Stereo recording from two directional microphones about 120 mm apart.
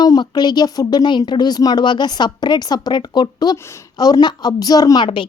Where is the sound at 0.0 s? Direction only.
35° left (ahead or behind).